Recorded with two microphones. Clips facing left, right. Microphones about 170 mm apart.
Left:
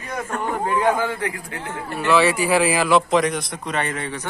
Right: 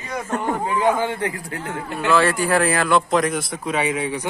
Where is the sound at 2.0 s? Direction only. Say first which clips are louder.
Left 1 dB; 5° left (ahead or behind).